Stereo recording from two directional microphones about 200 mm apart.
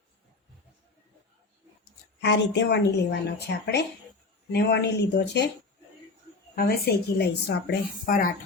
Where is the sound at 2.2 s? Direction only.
60° left (ahead or behind).